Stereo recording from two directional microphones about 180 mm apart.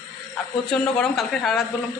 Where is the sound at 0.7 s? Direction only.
5° left (ahead or behind).